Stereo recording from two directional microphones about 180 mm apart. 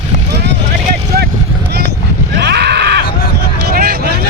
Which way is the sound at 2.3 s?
70° right (ahead or behind).